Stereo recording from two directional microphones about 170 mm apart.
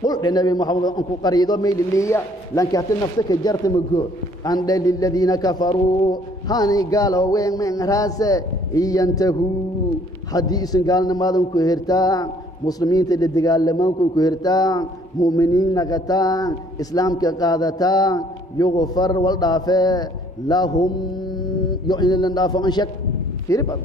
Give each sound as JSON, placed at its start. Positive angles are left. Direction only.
{"t": 0.0, "sound": "a man's voice", "side_deg": 25}